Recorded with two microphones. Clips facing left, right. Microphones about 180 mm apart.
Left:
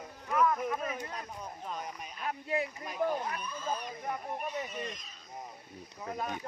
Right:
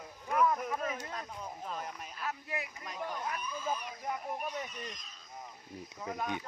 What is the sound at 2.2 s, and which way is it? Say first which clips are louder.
Speech: left 6 dB; 25° left (ahead or behind).